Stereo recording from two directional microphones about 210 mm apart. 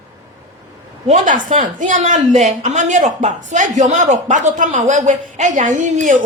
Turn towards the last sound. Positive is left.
turn(degrees=-35)  # may be behind; listen again after turning